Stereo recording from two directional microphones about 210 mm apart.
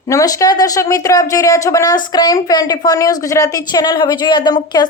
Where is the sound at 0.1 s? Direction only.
15° left (ahead or behind).